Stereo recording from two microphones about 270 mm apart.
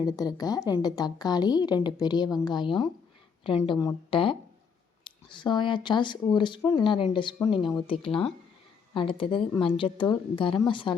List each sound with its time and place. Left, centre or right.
0.0 s speech: centre